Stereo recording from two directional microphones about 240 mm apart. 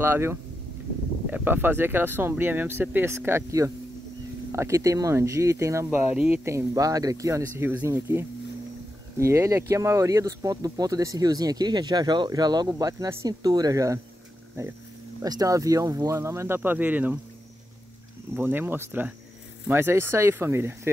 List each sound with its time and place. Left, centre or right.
0.0 s speech: centre
18.3 s speech: centre